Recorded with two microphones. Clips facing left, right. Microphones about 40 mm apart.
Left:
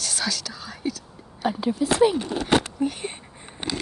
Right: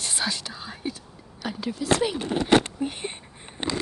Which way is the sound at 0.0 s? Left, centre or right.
Right.